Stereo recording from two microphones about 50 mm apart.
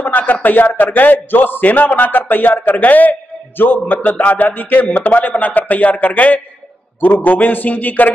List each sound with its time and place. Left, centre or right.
0.0 s a man's voice: left